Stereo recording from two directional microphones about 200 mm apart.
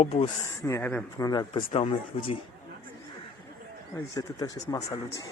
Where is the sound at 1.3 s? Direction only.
20° left (ahead or behind).